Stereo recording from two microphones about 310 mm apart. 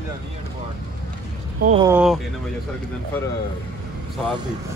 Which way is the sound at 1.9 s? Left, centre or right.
Centre.